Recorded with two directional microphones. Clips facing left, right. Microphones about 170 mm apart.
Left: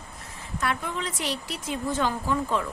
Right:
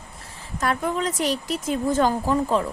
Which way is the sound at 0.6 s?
40° right (ahead or behind).